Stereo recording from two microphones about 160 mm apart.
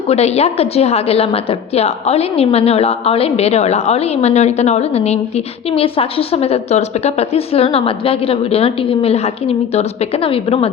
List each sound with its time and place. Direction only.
0.1 s a woman's voice: 40° left (ahead or behind)